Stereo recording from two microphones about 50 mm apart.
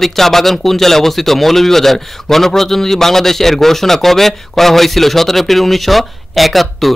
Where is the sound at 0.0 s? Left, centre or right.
Centre.